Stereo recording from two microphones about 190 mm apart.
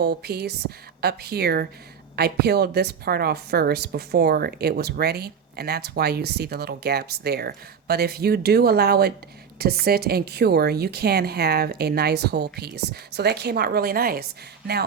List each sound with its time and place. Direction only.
0.0 s a woman's voice: 55° right (ahead or behind)